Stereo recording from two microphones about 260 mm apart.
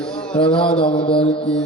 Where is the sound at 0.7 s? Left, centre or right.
Left.